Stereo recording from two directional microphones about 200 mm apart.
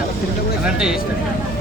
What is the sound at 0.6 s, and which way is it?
Speech, 5° right (ahead or behind).